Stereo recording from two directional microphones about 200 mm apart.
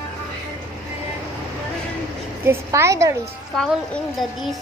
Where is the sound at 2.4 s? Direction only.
15° right (ahead or behind).